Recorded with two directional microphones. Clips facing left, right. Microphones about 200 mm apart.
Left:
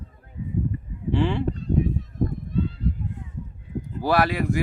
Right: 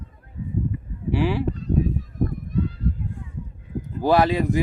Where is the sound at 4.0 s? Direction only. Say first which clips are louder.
Right 3 dB; 20° right (ahead or behind).